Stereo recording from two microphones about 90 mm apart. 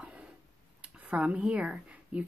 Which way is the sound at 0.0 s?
10° right (ahead or behind).